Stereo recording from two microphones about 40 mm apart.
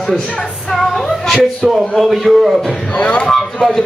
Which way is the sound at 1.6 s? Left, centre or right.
Centre.